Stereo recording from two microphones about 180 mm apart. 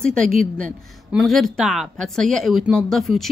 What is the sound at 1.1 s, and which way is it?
Speech, centre (ahead or behind).